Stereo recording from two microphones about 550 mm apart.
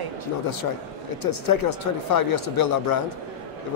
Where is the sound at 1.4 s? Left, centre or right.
Left.